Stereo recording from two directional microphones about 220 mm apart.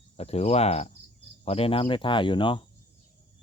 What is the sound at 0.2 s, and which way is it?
Cricket, 25° left (ahead or behind).